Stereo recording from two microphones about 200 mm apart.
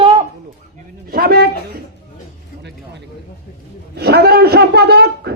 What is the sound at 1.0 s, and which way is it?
Speech, 50° right (ahead or behind).